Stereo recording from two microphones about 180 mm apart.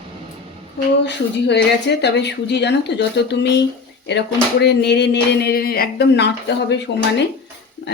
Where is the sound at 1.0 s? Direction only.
70° left (ahead or behind).